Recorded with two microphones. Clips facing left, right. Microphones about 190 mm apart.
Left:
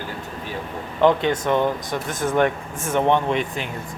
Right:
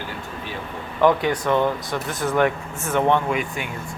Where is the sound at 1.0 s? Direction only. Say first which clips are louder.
Left 1 dB; 20° left (ahead or behind).